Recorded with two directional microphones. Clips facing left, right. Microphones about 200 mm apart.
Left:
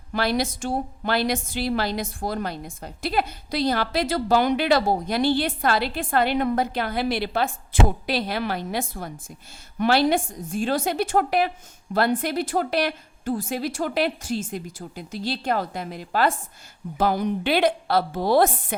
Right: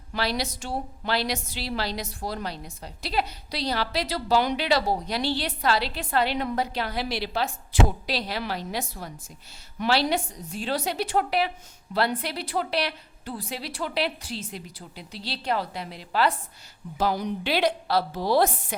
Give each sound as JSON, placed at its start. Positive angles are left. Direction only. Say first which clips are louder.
{"t": 0.1, "sound": "a woman's voice", "louder": "left 5 dB", "side_deg": 50}